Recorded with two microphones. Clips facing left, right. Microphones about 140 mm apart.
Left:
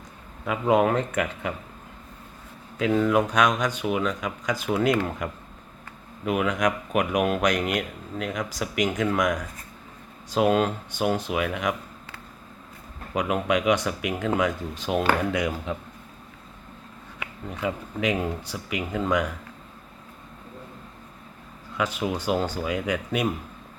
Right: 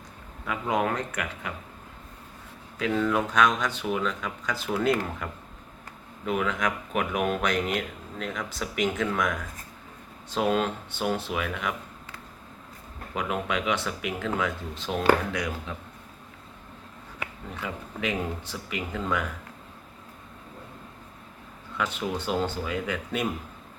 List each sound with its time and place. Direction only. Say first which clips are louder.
0.4 s speech: left 6 dB; 20° left (ahead or behind)
2.7 s speech: left 4 dB; 20° left (ahead or behind)
13.1 s speech: left 5 dB; 15° left (ahead or behind)
17.6 s speech: left 6 dB; 15° left (ahead or behind)
21.8 s speech: left 3 dB; 10° left (ahead or behind)